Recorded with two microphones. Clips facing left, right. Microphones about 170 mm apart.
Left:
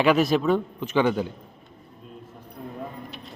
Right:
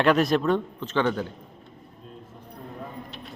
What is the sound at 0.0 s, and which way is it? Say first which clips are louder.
A man's voice: left 1 dB; centre (ahead or behind).